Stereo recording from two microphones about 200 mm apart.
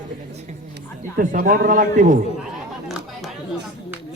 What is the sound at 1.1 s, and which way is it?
A man's voice, 45° right (ahead or behind).